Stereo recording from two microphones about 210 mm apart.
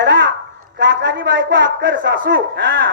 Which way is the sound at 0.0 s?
55° right (ahead or behind).